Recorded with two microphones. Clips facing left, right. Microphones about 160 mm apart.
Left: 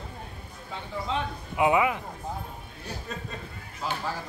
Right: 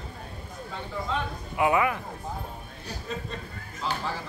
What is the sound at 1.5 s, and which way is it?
Speech, 15° left (ahead or behind).